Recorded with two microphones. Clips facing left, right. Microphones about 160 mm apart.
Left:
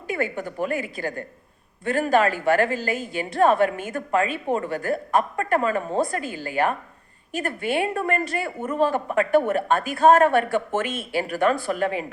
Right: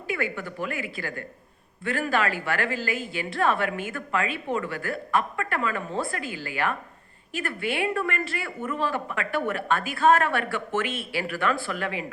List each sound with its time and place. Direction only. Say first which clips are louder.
0.1 s a woman's voice: left 3 dB; 45° left (ahead or behind)